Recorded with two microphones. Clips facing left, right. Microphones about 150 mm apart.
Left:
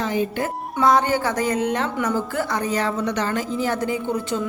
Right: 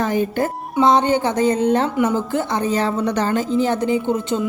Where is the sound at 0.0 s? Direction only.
50° right (ahead or behind).